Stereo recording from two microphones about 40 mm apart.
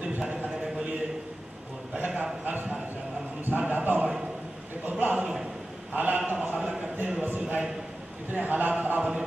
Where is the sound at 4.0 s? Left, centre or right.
Right.